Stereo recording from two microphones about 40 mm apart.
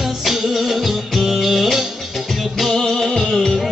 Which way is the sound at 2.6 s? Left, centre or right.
Centre.